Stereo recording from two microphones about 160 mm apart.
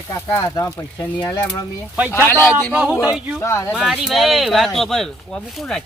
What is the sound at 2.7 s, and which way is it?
Speech, 10° right (ahead or behind).